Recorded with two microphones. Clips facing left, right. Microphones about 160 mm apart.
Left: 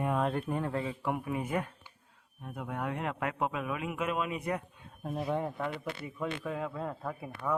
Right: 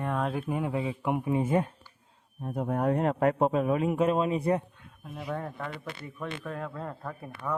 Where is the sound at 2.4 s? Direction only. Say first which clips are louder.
Right 8 dB; 40° right (ahead or behind).